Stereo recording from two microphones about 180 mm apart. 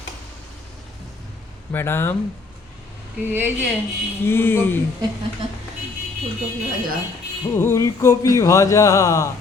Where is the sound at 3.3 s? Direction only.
10° right (ahead or behind).